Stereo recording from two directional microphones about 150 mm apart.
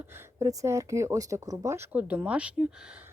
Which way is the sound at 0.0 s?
15° right (ahead or behind).